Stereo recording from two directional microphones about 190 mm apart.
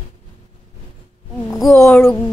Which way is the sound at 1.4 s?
Centre (ahead or behind).